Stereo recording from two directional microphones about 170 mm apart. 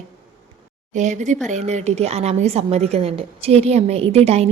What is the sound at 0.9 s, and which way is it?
A woman's voice, 45° right (ahead or behind).